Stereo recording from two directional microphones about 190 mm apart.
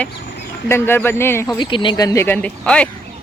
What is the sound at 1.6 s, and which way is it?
Speech, 25° left (ahead or behind).